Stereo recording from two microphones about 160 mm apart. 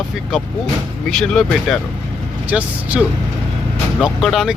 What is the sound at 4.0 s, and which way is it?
Speech, centre (ahead or behind).